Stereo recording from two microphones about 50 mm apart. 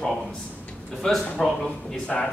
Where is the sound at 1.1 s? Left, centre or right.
Centre.